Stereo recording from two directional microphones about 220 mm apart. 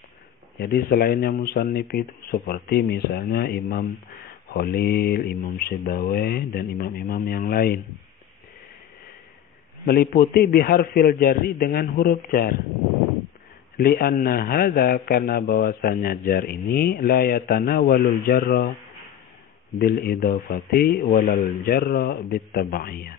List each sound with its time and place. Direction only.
0.6 s a man's voice: 45° left (ahead or behind)
9.8 s a man's voice: 45° left (ahead or behind)
13.7 s a man's voice: 45° left (ahead or behind)
19.8 s a man's voice: 45° left (ahead or behind)